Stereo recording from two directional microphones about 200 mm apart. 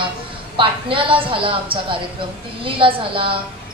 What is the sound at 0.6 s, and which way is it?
Speech, 25° right (ahead or behind).